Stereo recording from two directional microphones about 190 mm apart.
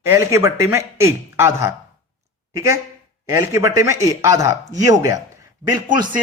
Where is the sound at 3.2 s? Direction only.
15° right (ahead or behind).